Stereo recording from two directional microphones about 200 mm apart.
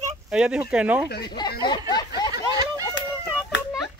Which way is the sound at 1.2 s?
20° left (ahead or behind).